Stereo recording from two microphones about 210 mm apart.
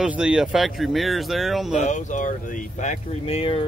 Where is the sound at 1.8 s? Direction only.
35° left (ahead or behind).